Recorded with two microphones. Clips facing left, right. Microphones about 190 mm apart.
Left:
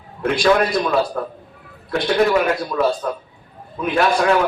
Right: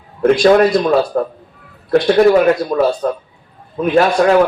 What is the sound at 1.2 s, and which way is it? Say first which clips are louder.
A man's voice: right 8 dB; 45° right (ahead or behind).